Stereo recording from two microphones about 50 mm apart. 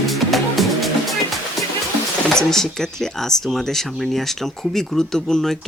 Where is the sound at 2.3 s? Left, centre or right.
Centre.